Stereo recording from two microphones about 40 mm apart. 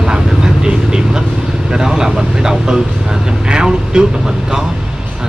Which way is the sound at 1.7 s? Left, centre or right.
Centre.